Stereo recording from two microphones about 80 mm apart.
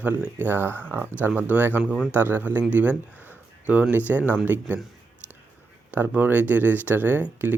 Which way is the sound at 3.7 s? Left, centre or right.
Right.